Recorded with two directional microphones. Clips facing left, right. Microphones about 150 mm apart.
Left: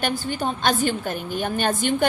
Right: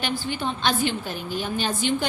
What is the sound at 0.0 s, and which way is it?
A woman's voice, 45° left (ahead or behind).